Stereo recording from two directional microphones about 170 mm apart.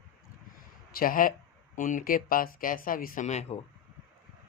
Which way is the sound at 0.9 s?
55° left (ahead or behind).